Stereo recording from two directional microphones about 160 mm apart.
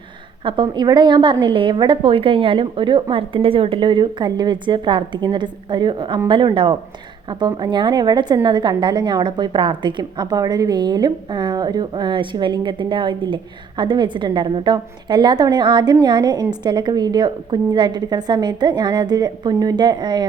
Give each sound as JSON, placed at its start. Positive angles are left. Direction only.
{"t": 0.4, "sound": "a woman's voice", "side_deg": -30}